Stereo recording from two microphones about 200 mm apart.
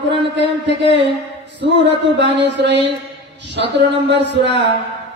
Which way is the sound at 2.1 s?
60° right (ahead or behind).